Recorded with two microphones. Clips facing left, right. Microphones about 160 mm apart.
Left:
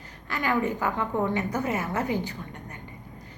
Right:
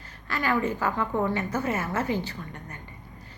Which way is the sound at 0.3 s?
15° left (ahead or behind).